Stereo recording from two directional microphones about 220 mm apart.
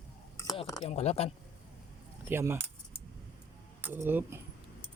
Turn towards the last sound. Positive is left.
turn(degrees=-10)  # may be behind; listen again after turning